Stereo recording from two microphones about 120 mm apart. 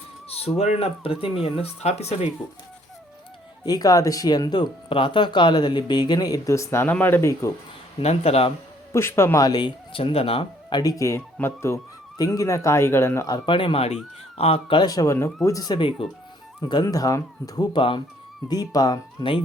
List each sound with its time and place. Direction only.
0.3 s speech: 60° left (ahead or behind)
1.8 s speech: 65° left (ahead or behind)
3.7 s speech: 30° left (ahead or behind)
8.0 s speech: 60° left (ahead or behind)
8.9 s speech: 20° left (ahead or behind); by 10.8 s 55° left (ahead or behind)
10.8 s speech: 30° left (ahead or behind); by 14.8 s 55° left (ahead or behind)
14.8 s speech: 30° left (ahead or behind)
17.7 s speech: 45° left (ahead or behind)